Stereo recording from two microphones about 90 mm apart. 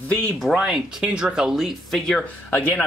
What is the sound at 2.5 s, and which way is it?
Speech, 15° left (ahead or behind).